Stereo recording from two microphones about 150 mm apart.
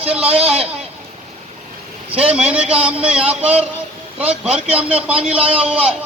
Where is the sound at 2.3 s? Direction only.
10° right (ahead or behind).